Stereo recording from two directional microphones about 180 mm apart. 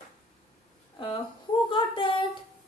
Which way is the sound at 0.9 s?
30° left (ahead or behind).